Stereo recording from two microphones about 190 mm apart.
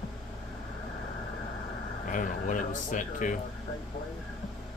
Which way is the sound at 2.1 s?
45° left (ahead or behind).